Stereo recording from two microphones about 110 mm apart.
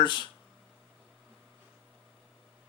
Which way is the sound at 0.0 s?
45° left (ahead or behind).